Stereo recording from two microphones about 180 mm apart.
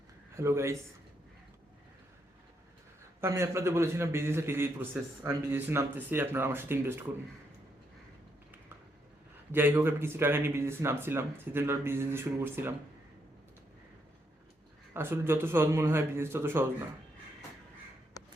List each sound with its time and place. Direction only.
0.3 s a man's voice: 15° right (ahead or behind)
3.2 s a man's voice: 15° right (ahead or behind)
9.5 s a man's voice: 10° right (ahead or behind)
14.9 s a man's voice: 10° right (ahead or behind)